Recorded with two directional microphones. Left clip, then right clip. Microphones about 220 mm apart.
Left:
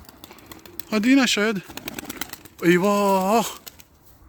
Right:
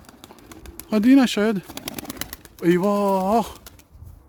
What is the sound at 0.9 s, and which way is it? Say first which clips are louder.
Speech: right 1 dB; 20° right (ahead or behind).